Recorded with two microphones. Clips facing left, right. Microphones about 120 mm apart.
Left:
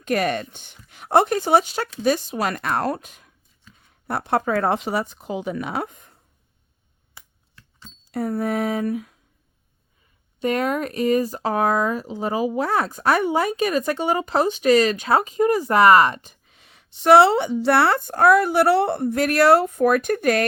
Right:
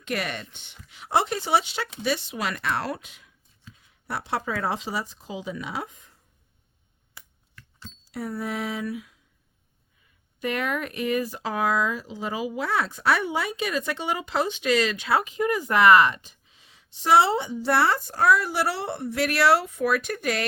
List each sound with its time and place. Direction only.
0.0 s speech: 45° left (ahead or behind)
7.1 s a sound: 20° left (ahead or behind)
8.1 s speech: 50° left (ahead or behind)
10.4 s speech: 35° left (ahead or behind)